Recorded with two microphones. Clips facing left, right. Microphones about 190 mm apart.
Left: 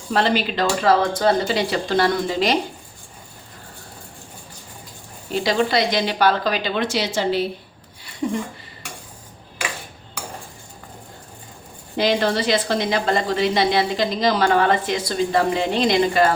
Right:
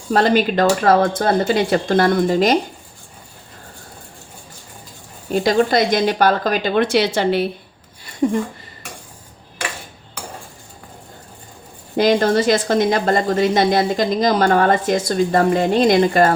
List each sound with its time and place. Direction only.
0.1 s a woman's voice: 45° right (ahead or behind)
5.3 s a woman's voice: 45° right (ahead or behind)
11.9 s a woman's voice: 45° right (ahead or behind)